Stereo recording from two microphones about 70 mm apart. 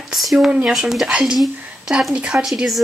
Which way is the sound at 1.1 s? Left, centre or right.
Centre.